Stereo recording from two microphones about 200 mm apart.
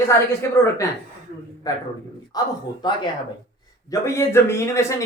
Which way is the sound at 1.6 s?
20° left (ahead or behind).